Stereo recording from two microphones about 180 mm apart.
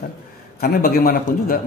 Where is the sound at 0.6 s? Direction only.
55° left (ahead or behind).